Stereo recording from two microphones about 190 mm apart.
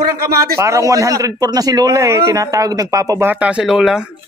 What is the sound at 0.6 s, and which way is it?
Speech, 15° right (ahead or behind).